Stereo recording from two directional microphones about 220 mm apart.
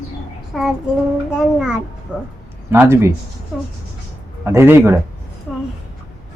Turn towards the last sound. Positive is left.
turn(degrees=0)  # may be behind; listen again after turning